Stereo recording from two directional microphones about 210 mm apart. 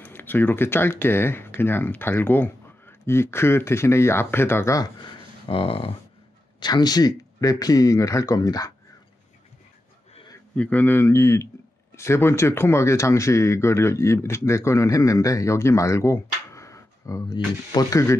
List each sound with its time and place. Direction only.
0.0 s speech: 10° left (ahead or behind)
5.5 s speech: 25° left (ahead or behind)
10.1 s a sound: 20° left (ahead or behind)
10.5 s speech: 5° left (ahead or behind)